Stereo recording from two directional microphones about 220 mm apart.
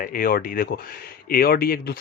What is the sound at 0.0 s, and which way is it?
Speech, 40° left (ahead or behind).